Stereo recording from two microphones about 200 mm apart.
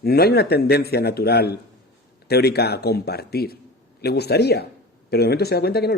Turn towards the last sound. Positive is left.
turn(degrees=50)  # may be behind; listen again after turning